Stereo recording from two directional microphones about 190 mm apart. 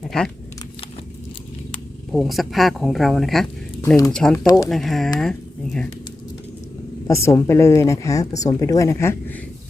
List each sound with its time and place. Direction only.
0.1 s speech: 5° left (ahead or behind)
2.1 s speech: centre (ahead or behind)
3.8 s speech: 15° left (ahead or behind)
4.1 s speech: 5° left (ahead or behind)
7.1 s speech: 15° left (ahead or behind)